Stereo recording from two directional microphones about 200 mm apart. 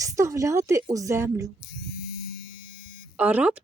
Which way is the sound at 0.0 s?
15° right (ahead or behind).